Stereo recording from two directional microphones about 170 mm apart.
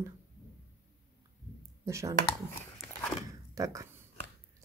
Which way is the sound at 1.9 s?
15° right (ahead or behind).